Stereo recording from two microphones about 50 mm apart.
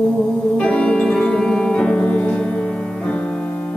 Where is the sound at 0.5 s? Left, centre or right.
Left.